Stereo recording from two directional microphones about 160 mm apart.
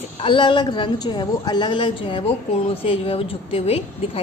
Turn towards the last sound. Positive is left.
turn(degrees=35)  # may be behind; listen again after turning